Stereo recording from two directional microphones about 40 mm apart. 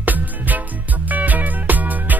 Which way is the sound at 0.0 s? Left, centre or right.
Right.